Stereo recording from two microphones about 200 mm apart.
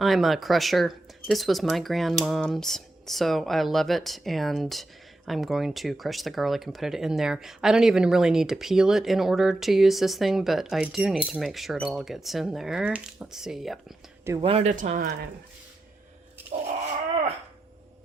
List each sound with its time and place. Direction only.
0.0 s speech: centre (ahead or behind)
14.4 s speech: 30° right (ahead or behind)